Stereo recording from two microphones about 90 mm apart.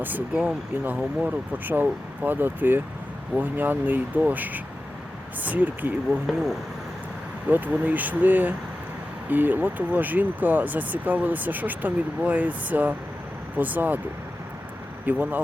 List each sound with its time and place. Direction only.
0.0 s speech: 20° right (ahead or behind)
6.2 s speech: centre (ahead or behind)
7.4 s speech: 20° right (ahead or behind)
15.0 s speech: 20° right (ahead or behind)